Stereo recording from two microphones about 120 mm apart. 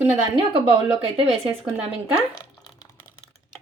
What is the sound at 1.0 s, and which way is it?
Speech, 50° right (ahead or behind).